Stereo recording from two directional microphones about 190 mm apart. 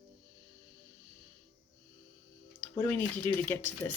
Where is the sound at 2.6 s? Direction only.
10° left (ahead or behind).